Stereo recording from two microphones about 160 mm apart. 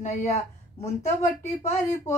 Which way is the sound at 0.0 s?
45° left (ahead or behind).